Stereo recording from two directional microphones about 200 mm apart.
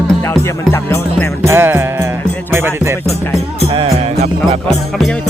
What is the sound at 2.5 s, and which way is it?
Music, 10° right (ahead or behind).